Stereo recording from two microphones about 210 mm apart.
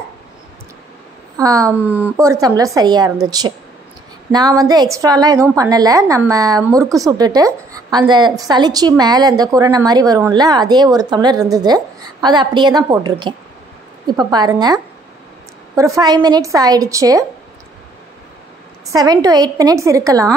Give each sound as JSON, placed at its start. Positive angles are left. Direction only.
{"t": 1.3, "sound": "a woman's voice", "side_deg": -15}
{"t": 18.9, "sound": "a woman's voice", "side_deg": -15}